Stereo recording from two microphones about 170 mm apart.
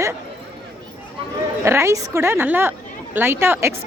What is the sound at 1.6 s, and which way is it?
A woman's voice, 15° right (ahead or behind).